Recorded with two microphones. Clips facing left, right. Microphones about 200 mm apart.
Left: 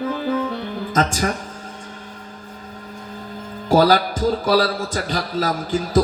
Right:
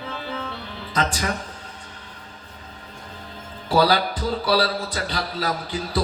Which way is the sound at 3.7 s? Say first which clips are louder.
Left 4 dB; 45° left (ahead or behind).